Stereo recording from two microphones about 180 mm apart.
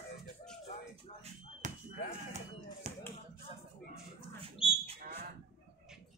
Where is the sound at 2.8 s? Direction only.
40° right (ahead or behind).